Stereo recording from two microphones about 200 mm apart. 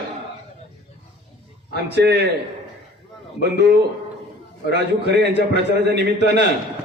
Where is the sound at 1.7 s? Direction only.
55° right (ahead or behind).